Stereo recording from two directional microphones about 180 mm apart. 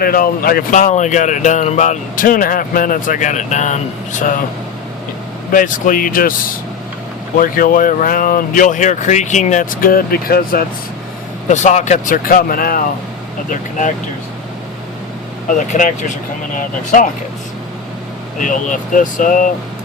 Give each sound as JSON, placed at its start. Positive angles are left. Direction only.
{"t": 0.0, "sound": "speech", "side_deg": 55}
{"t": 5.5, "sound": "speech", "side_deg": 50}
{"t": 11.4, "sound": "speech", "side_deg": 40}
{"t": 15.5, "sound": "speech", "side_deg": 45}
{"t": 18.3, "sound": "speech", "side_deg": 45}